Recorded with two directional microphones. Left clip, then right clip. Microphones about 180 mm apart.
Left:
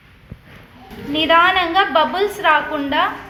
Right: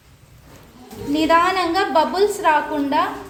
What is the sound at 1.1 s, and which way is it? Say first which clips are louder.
A woman's voice: left 3 dB; 35° right (ahead or behind).